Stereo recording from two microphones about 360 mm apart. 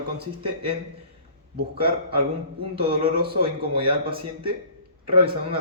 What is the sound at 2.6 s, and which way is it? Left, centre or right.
Speech, centre.